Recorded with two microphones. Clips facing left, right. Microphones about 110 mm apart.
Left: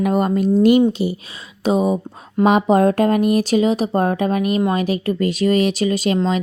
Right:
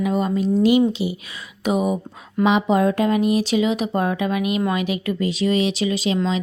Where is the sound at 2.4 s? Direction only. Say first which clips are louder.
Left 4 dB; 45° left (ahead or behind).